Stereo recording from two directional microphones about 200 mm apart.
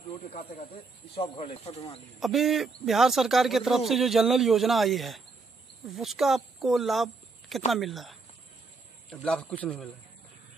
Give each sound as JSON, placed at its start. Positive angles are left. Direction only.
{"t": 0.3, "sound": "speech", "side_deg": 30}
{"t": 2.1, "sound": "speech", "side_deg": 0}